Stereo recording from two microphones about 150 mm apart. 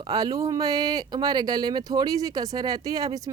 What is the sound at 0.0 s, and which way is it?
Speech, 25° right (ahead or behind).